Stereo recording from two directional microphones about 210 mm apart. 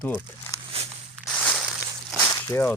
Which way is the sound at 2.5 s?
10° left (ahead or behind).